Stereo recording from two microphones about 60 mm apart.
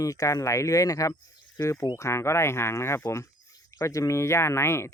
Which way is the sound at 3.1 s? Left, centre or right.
Left.